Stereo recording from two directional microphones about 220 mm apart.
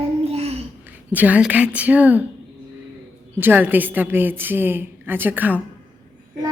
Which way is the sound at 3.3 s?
10° right (ahead or behind).